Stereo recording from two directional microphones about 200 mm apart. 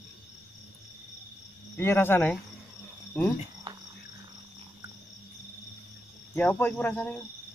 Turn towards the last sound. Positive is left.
turn(degrees=10)  # may be behind; listen again after turning